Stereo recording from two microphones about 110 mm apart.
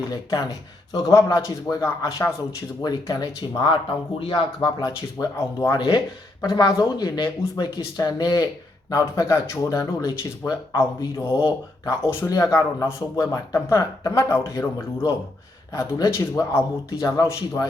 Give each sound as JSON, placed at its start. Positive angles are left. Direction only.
{"t": 0.1, "sound": "speech", "side_deg": 35}
{"t": 4.2, "sound": "speech", "side_deg": 50}
{"t": 4.8, "sound": "speech", "side_deg": 30}
{"t": 5.7, "sound": "speech", "side_deg": 40}
{"t": 11.4, "sound": "speech", "side_deg": 25}